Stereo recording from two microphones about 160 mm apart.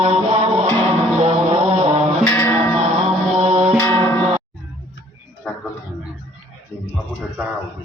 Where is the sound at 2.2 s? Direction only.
10° left (ahead or behind).